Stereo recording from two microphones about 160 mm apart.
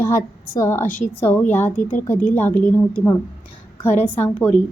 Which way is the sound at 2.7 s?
15° left (ahead or behind).